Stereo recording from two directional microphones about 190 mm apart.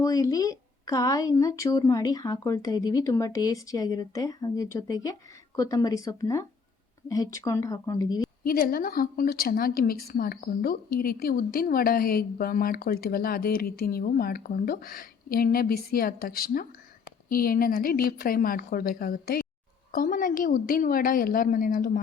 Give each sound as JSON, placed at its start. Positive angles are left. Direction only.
{"t": 0.0, "sound": "a woman's voice", "side_deg": 20}
{"t": 8.4, "sound": "a woman's voice", "side_deg": 50}